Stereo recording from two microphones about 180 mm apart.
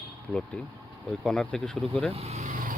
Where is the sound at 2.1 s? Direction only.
35° right (ahead or behind).